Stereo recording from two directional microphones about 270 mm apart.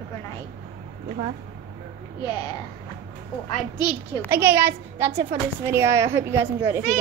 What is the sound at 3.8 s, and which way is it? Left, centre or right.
Speech, centre.